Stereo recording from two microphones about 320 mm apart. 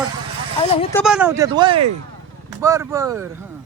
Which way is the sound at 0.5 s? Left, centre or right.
Centre.